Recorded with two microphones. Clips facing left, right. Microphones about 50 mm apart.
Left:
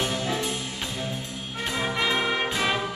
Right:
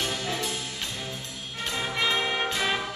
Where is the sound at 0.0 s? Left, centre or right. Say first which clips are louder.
Left 3 dB; centre.